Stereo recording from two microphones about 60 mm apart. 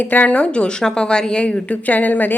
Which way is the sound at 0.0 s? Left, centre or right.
Left.